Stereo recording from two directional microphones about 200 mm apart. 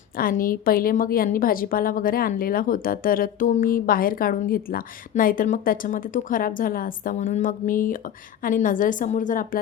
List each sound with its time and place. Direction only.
0.2 s a woman's voice: 45° left (ahead or behind)